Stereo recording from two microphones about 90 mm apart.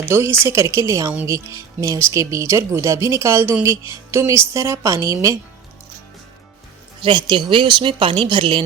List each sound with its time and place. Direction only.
0.0 s a woman's voice: 30° right (ahead or behind)
7.0 s a woman's voice: 60° right (ahead or behind)